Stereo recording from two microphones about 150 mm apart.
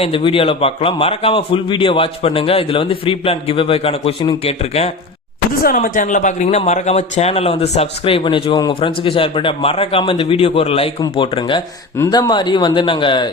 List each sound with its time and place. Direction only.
0.0 s a man's voice: 35° left (ahead or behind)
5.6 s a man's voice: 70° left (ahead or behind); by 11.6 s 35° left (ahead or behind)
11.9 s a man's voice: 20° left (ahead or behind)